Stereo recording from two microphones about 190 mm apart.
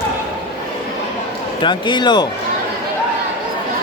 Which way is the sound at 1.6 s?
25° left (ahead or behind).